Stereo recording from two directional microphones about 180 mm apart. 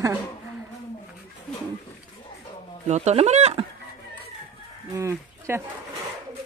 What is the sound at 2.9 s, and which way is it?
Speech, 40° right (ahead or behind).